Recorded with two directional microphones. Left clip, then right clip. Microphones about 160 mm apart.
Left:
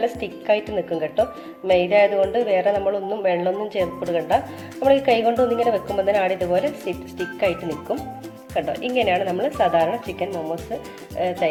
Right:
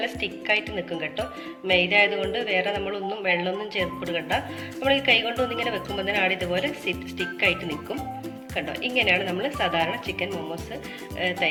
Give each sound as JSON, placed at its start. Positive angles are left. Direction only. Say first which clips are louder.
{"t": 0.0, "sound": "speech", "louder": "left 4 dB", "side_deg": 45}
{"t": 8.5, "sound": "speech", "louder": "left 4 dB", "side_deg": 40}